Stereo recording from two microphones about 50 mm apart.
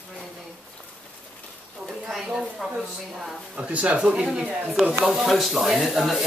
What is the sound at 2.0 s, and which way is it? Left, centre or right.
Speech, centre.